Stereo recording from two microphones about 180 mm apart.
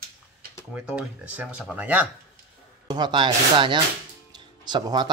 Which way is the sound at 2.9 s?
25° right (ahead or behind).